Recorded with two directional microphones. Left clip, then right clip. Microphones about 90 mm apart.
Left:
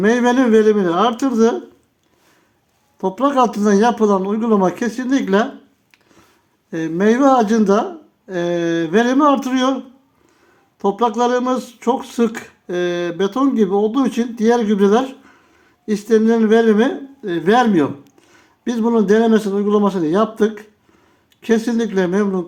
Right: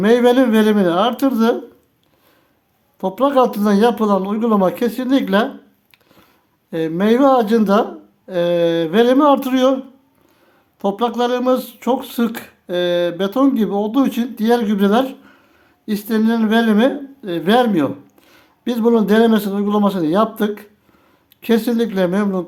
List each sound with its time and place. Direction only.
0.0 s speech: 25° right (ahead or behind); by 1.5 s 10° right (ahead or behind)
3.0 s speech: 20° right (ahead or behind)
5.9 s a sound: 20° right (ahead or behind)
6.7 s speech: 20° right (ahead or behind)
10.8 s speech: 15° right (ahead or behind)